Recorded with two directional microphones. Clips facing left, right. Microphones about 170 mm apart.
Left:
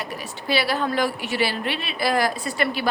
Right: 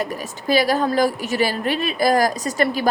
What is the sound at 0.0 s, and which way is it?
A woman's voice, 45° right (ahead or behind).